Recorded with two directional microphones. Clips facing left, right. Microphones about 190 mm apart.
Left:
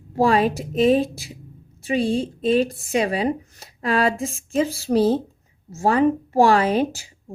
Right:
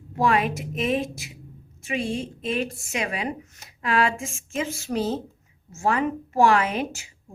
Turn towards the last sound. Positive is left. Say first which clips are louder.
# left 7 dB
turn(degrees=35)  # may be behind; listen again after turning